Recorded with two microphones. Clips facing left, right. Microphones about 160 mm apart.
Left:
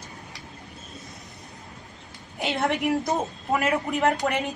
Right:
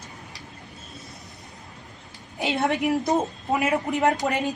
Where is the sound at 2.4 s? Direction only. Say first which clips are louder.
Right 1 dB; 20° right (ahead or behind).